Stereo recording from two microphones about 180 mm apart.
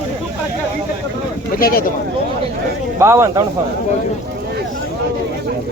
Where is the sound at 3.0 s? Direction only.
15° right (ahead or behind).